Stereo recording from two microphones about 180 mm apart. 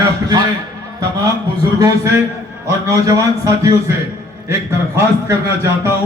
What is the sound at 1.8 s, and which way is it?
A man's voice, 15° right (ahead or behind).